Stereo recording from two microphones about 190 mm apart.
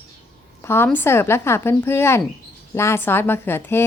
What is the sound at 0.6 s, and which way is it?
A woman's voice, 10° left (ahead or behind).